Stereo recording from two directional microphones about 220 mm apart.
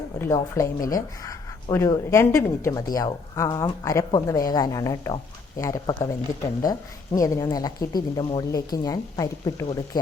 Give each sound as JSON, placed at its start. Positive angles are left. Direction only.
{"t": 0.2, "sound": "speech", "side_deg": 15}